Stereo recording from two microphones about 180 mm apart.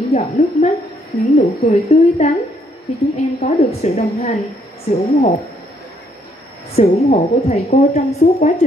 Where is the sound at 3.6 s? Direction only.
40° left (ahead or behind).